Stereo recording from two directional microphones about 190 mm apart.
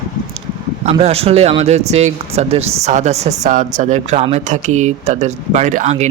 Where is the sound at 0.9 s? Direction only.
30° right (ahead or behind).